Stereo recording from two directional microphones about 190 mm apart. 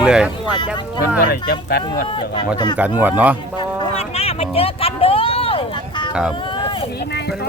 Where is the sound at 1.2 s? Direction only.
55° left (ahead or behind).